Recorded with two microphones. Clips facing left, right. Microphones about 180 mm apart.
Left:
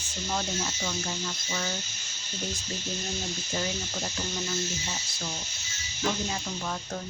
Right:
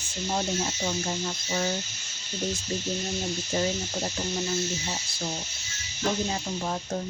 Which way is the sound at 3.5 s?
25° right (ahead or behind).